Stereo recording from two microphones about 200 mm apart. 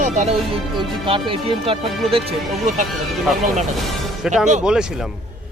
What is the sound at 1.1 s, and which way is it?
Speech, 25° right (ahead or behind).